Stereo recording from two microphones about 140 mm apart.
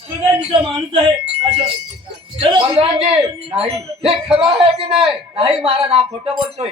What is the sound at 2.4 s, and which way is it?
A man's voice, 35° right (ahead or behind).